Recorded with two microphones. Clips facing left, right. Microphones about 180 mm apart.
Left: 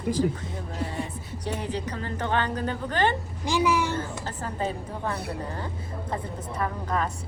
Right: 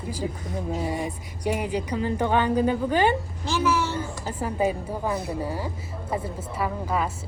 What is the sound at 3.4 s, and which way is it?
Speech, 15° left (ahead or behind).